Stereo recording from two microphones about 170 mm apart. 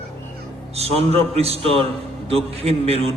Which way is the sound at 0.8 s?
35° right (ahead or behind).